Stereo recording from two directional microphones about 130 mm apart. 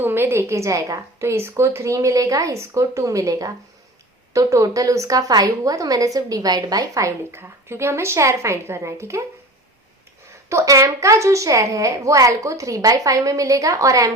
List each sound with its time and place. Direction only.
0.0 s a woman's voice: 15° right (ahead or behind)
10.5 s a woman's voice: 25° right (ahead or behind)